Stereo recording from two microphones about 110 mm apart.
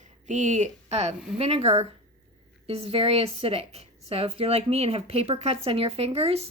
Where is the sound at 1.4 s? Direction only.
70° right (ahead or behind).